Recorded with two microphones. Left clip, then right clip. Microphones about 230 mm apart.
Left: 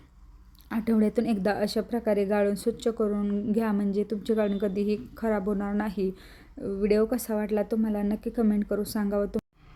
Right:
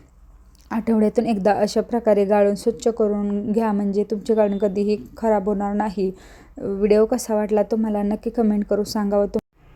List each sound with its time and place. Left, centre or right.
0.7 s a woman's voice: centre